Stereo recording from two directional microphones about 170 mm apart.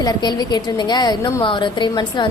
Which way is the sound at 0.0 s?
25° left (ahead or behind).